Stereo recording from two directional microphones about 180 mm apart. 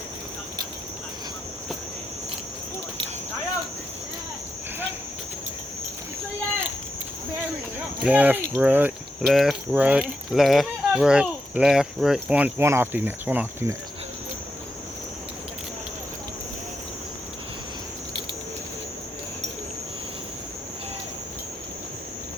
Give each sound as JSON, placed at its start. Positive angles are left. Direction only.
{"t": 8.0, "sound": "speech", "side_deg": -10}